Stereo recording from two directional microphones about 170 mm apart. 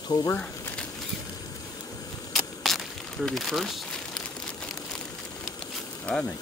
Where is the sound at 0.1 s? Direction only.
25° left (ahead or behind).